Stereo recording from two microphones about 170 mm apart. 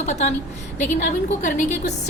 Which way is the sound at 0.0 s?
40° left (ahead or behind).